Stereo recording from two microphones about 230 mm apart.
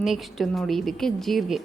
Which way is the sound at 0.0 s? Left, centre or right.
Centre.